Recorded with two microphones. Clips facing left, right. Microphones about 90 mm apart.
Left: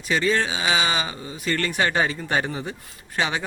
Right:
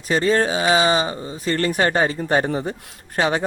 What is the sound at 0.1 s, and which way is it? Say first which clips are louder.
Speech: right 4 dB; 40° right (ahead or behind).